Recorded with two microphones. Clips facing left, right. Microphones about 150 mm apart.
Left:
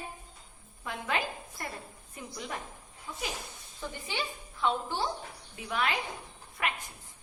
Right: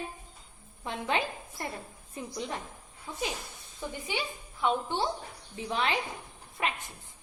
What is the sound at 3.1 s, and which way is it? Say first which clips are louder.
A woman's voice: right 3 dB; 25° right (ahead or behind).